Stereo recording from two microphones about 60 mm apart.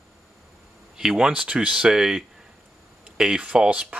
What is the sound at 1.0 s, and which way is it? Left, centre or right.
Speech, centre.